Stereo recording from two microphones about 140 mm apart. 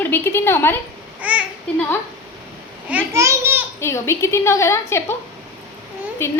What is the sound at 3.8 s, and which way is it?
A child's voice, 20° left (ahead or behind).